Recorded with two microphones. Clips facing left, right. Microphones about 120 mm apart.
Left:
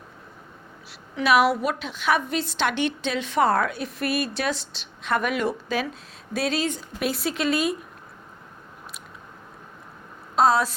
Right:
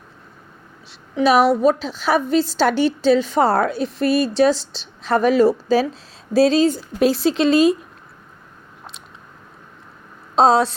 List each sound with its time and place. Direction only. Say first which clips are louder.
0.9 s a woman's voice: right 5 dB; 30° right (ahead or behind)
10.3 s speech: right 5 dB; 30° right (ahead or behind)